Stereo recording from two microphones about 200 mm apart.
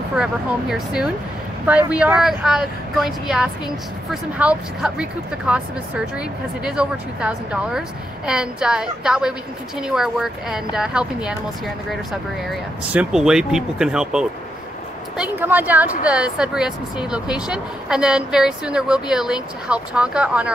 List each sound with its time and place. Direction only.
0.1 s a woman's voice: 5° right (ahead or behind)